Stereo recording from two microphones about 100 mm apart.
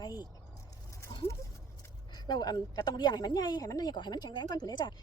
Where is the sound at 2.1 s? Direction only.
45° left (ahead or behind).